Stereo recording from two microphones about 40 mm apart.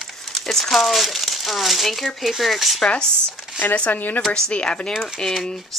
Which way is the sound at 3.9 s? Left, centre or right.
Left.